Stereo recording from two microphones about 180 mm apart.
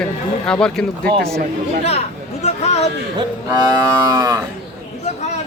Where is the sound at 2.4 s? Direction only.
35° left (ahead or behind).